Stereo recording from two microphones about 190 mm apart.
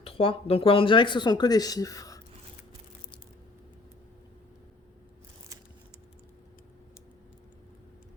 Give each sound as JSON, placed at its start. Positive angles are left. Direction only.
{"t": 0.0, "sound": "speech", "side_deg": 30}